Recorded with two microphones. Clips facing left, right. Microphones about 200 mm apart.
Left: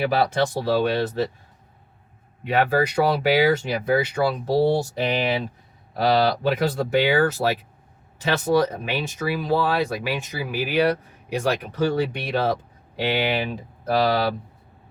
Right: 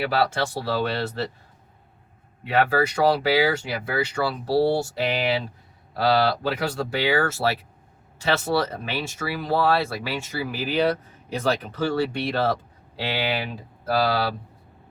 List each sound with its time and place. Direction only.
0.1 s speech: 15° left (ahead or behind)
2.4 s speech: 15° left (ahead or behind)